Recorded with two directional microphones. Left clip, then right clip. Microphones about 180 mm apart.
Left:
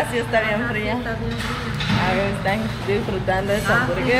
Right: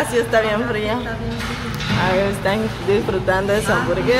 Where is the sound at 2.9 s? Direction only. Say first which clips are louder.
Right 5 dB; 20° right (ahead or behind).